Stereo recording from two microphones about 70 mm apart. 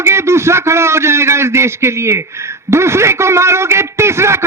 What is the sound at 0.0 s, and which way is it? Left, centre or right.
A man's voice, right.